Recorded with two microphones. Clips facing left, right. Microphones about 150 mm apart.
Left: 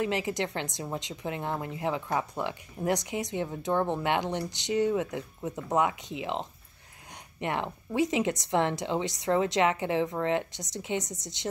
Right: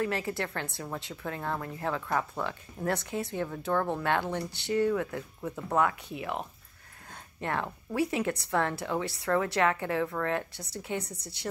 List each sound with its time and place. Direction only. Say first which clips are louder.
0.0 s speech: left 2 dB; 20° left (ahead or behind)